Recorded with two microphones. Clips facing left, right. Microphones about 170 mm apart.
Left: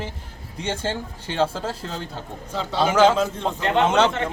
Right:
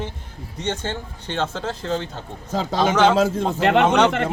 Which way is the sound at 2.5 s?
40° right (ahead or behind).